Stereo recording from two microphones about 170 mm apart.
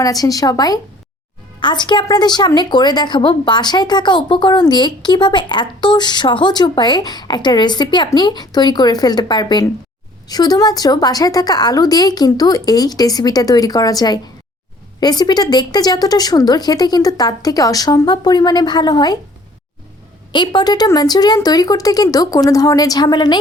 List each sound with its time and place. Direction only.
0.0 s a woman's voice: 20° left (ahead or behind)
20.3 s a woman's voice: 25° left (ahead or behind)